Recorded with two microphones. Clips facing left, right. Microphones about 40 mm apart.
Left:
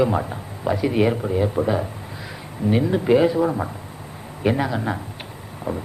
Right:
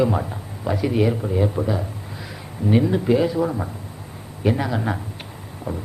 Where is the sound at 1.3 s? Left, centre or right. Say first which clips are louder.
Left 1 dB; centre.